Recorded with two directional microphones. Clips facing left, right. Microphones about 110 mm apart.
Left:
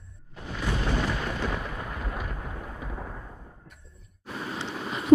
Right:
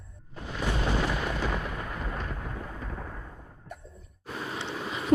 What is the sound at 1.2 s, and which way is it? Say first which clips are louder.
Thunder: even; centre (ahead or behind).